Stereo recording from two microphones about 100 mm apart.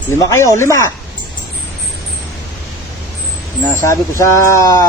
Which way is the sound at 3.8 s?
30° left (ahead or behind).